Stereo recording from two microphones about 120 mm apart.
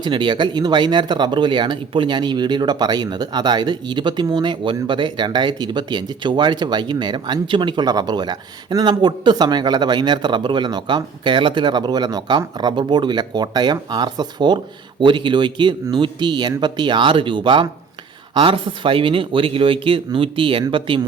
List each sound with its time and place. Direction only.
0.0 s speech: 40° right (ahead or behind)